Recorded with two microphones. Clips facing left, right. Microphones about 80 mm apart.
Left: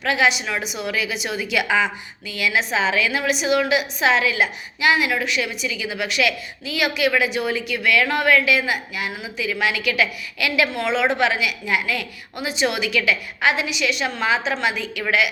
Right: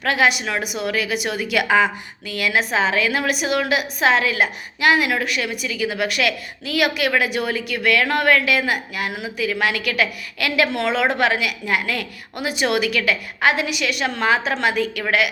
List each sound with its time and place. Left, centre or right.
0.0 s a woman's voice: right
10.7 s a woman's voice: right
11.1 s a woman's voice: right